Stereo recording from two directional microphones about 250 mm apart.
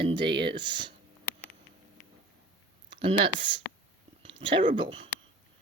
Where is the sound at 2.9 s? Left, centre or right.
Right.